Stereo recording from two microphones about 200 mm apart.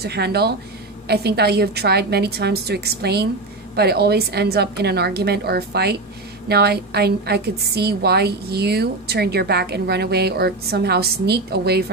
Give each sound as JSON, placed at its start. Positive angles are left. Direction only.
{"t": 0.0, "sound": "a woman's voice", "side_deg": -55}